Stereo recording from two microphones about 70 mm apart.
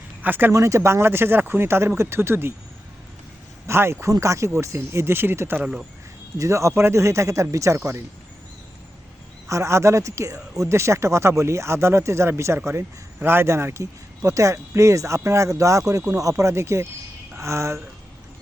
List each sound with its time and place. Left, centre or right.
0.2 s speech: right
0.5 s speech: right
3.7 s speech: right
4.1 s speech: right
6.3 s speech: right
9.5 s speech: right